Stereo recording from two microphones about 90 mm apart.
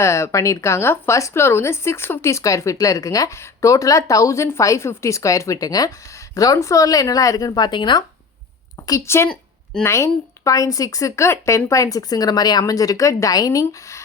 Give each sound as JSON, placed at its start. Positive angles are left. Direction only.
{"t": 0.0, "sound": "speech", "side_deg": 30}
{"t": 9.0, "sound": "a woman's voice", "side_deg": 30}